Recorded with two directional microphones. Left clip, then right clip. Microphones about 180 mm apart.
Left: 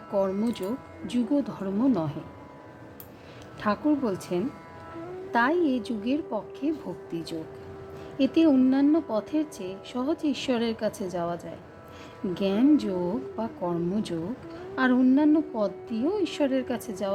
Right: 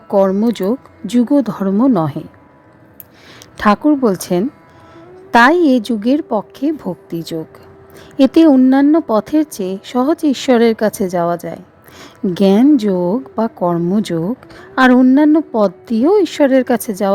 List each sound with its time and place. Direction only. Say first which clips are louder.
0.1 s speech: right 14 dB; 55° right (ahead or behind)
3.6 s a woman's voice: right 14 dB; 55° right (ahead or behind)